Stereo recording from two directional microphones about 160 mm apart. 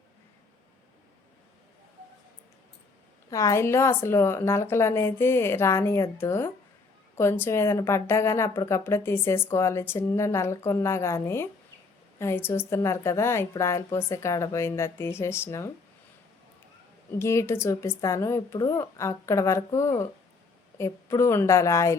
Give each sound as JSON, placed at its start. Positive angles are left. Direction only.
{"t": 3.2, "sound": "a woman's voice", "side_deg": 20}
{"t": 17.2, "sound": "a woman's voice", "side_deg": 15}